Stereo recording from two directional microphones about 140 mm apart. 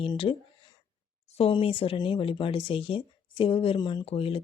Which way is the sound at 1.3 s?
45° left (ahead or behind).